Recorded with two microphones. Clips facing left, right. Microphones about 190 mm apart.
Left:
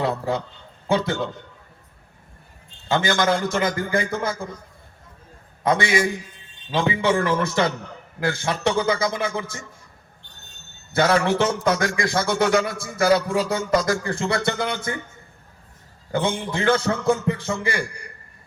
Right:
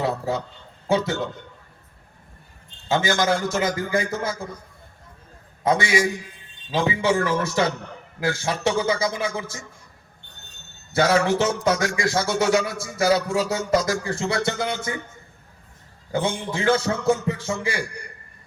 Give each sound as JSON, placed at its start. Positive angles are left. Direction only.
{"t": 0.0, "sound": "a sound", "side_deg": 60}
{"t": 0.9, "sound": "a man's voice", "side_deg": 60}
{"t": 2.9, "sound": "a man's voice", "side_deg": 60}
{"t": 5.6, "sound": "a man's voice", "side_deg": 55}
{"t": 10.9, "sound": "a man's voice", "side_deg": 60}
{"t": 16.1, "sound": "a man's voice", "side_deg": 60}